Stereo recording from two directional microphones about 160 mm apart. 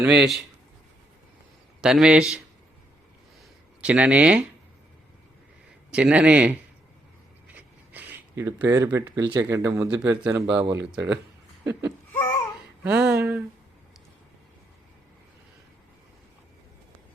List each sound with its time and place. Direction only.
0.0 s a man's voice: 5° right (ahead or behind)
1.8 s a man's voice: 5° right (ahead or behind)
3.8 s a man's voice: 5° right (ahead or behind)
5.9 s a man's voice: 5° right (ahead or behind)
7.4 s a sound: 10° right (ahead or behind)
9.3 s speech: 15° right (ahead or behind)
10.0 s a man's voice: 10° right (ahead or behind)